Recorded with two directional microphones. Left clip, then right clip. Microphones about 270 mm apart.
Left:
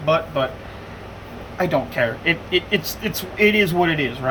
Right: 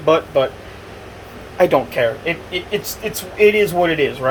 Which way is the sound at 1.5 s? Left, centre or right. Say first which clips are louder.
Right 6 dB; centre.